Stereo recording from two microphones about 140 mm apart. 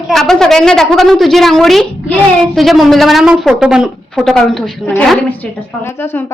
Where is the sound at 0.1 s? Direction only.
5° left (ahead or behind).